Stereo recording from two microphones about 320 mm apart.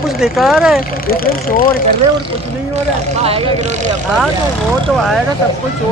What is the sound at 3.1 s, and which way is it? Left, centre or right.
Speech, centre.